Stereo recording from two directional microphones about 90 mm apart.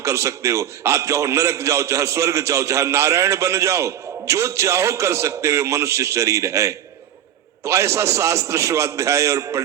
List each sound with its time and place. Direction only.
0.0 s a man's voice: 35° right (ahead or behind)